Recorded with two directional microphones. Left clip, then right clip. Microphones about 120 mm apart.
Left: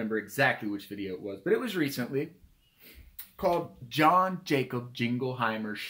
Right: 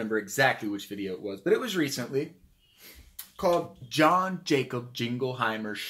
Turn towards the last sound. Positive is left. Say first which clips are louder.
# right 1 dB
turn(degrees=15)  # may be behind; listen again after turning